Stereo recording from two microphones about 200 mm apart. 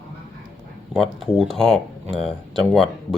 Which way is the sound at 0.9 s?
Centre (ahead or behind).